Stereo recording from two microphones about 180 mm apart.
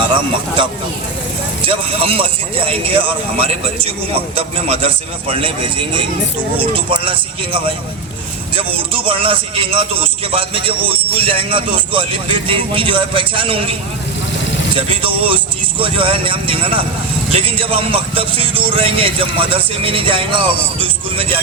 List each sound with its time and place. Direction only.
0.1 s a man's voice: 25° right (ahead or behind)
6.6 s a man's voice: 30° right (ahead or behind)
14.8 s a man's voice: 30° right (ahead or behind)